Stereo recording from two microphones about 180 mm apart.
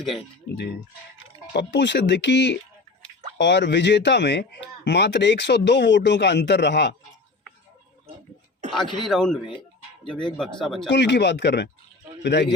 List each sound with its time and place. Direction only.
1.5 s speech: 75° left (ahead or behind)
9.0 s speech: centre (ahead or behind)
10.8 s speech: 75° left (ahead or behind)